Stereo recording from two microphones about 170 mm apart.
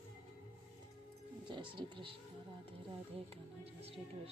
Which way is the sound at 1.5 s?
30° right (ahead or behind).